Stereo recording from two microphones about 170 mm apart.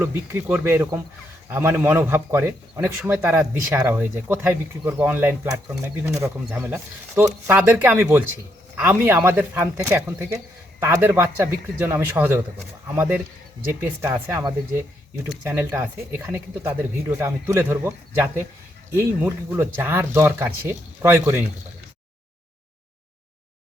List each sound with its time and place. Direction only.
0.0 s speech: 15° right (ahead or behind)